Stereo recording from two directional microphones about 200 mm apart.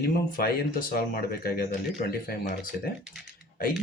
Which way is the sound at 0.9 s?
45° left (ahead or behind).